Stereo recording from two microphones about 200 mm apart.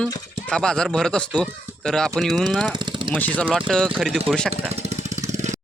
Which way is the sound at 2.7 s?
25° right (ahead or behind).